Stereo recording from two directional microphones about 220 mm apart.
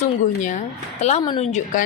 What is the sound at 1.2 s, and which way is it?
Speech, 20° left (ahead or behind).